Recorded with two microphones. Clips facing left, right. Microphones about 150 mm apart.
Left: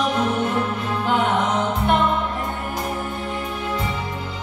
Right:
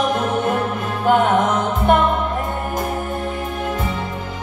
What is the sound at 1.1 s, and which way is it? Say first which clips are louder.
Music: right 7 dB; 50° right (ahead or behind).